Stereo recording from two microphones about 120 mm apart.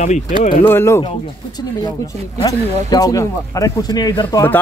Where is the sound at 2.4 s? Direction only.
30° left (ahead or behind).